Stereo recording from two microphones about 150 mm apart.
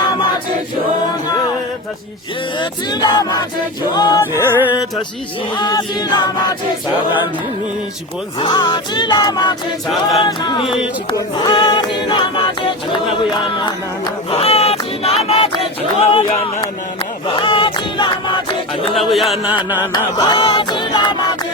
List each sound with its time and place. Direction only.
2.6 s music: 30° left (ahead or behind)
4.5 s music: 10° right (ahead or behind)
5.5 s music: 30° left (ahead or behind)
8.4 s music: 35° left (ahead or behind)
14.3 s a sound: 40° left (ahead or behind)
17.2 s choir: 35° left (ahead or behind)
18.9 s speech: centre (ahead or behind)
19.9 s a sound: 30° left (ahead or behind)